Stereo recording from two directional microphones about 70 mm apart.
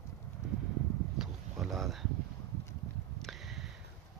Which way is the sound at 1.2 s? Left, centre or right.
Centre.